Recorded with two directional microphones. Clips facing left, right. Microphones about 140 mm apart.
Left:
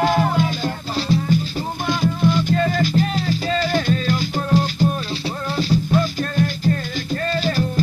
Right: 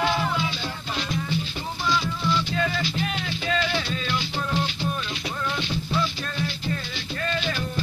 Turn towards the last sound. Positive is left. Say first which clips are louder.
# left 6 dB
turn(degrees=40)  # may be behind; listen again after turning